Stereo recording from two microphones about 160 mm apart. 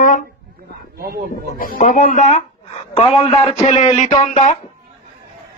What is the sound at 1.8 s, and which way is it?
Speech, 50° left (ahead or behind).